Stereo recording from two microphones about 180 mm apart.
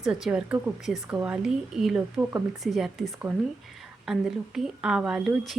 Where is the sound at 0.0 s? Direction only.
5° right (ahead or behind).